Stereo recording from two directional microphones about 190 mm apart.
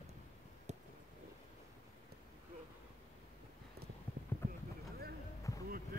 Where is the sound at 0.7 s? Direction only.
35° right (ahead or behind).